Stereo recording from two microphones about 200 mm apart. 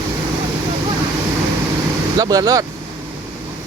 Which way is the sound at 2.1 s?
20° right (ahead or behind).